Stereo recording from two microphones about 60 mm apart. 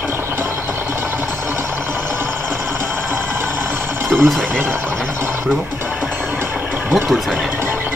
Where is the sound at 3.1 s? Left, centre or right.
Right.